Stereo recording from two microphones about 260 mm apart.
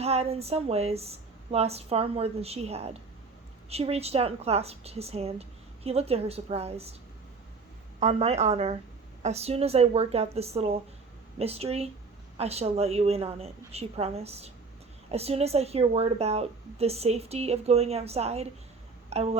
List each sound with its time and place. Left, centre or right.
0.0 s a woman's voice: right
7.9 s a woman's voice: right